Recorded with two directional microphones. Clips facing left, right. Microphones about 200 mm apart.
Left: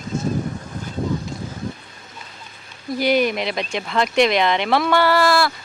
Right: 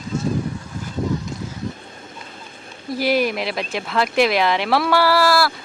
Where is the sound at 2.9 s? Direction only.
5° right (ahead or behind).